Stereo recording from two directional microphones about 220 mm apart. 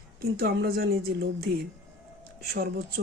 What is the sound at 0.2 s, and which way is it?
Speech, 45° right (ahead or behind).